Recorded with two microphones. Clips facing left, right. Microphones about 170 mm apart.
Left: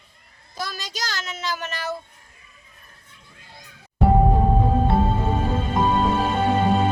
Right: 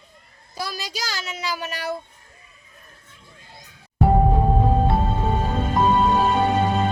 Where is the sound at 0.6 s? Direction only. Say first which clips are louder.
Right 1 dB; 10° right (ahead or behind).